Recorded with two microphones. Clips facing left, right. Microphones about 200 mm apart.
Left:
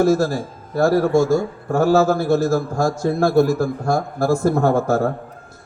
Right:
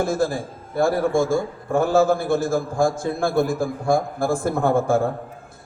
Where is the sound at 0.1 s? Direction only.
55° right (ahead or behind).